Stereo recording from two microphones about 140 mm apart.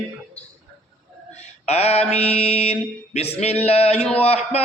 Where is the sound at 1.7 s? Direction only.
50° left (ahead or behind).